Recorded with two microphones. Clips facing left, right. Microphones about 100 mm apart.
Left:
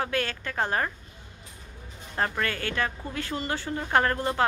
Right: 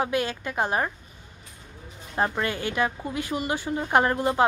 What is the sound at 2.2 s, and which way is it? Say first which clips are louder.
A woman's voice: right 3 dB; 20° right (ahead or behind).